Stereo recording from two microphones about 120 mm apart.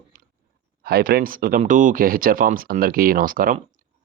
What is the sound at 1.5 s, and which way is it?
Speech, 90° right.